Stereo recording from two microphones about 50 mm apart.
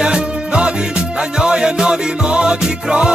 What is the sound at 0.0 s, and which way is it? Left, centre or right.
Music, centre.